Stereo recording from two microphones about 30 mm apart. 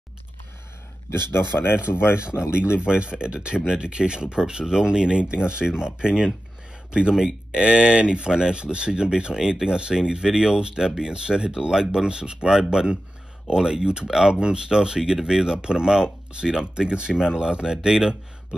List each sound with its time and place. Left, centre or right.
1.8 s speech: right; by 18.6 s centre